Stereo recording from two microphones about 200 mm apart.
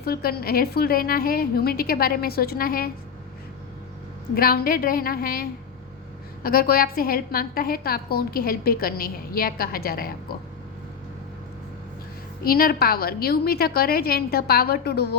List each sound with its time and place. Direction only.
0.0 s a woman's voice: 50° left (ahead or behind)
4.4 s a woman's voice: 45° left (ahead or behind)
12.5 s a woman's voice: 50° left (ahead or behind)